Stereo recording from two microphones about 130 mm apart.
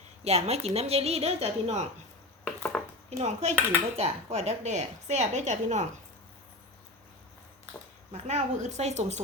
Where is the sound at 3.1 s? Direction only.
60° right (ahead or behind).